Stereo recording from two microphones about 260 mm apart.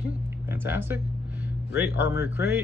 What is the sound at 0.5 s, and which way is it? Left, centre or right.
Speech, centre.